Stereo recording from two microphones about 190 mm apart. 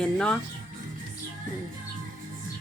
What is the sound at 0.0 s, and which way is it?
Speech, 5° left (ahead or behind).